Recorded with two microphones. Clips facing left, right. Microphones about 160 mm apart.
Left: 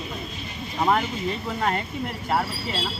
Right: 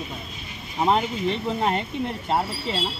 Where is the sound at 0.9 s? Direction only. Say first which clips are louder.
Right 2 dB; 20° right (ahead or behind).